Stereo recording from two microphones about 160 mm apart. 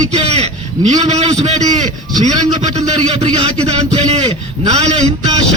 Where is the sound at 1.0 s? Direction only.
45° right (ahead or behind).